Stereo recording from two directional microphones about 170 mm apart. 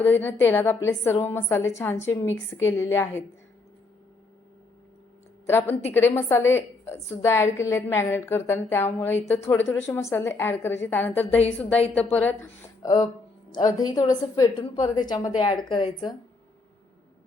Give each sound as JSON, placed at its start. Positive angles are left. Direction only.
{"t": 0.0, "sound": "a woman's voice", "side_deg": 10}
{"t": 5.5, "sound": "a woman's voice", "side_deg": 15}
{"t": 12.8, "sound": "a woman's voice", "side_deg": 20}